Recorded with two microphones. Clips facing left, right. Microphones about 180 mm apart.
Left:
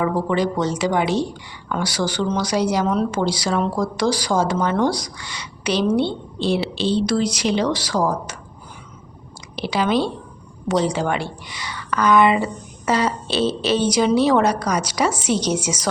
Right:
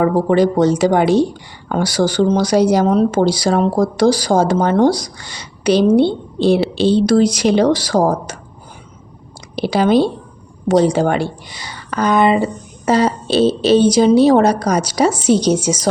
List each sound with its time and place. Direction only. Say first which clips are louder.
0.0 s speech: right 7 dB; 45° right (ahead or behind)
9.6 s speech: right 7 dB; 40° right (ahead or behind)